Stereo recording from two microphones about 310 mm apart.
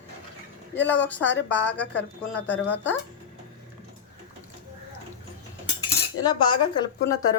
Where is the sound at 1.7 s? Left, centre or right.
Left.